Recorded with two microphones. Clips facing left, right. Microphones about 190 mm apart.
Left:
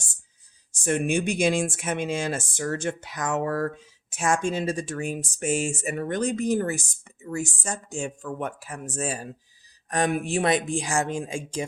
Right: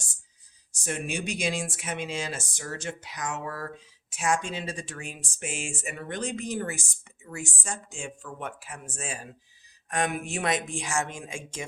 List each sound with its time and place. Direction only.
0.7 s speech: 55° left (ahead or behind); by 11.6 s 35° left (ahead or behind)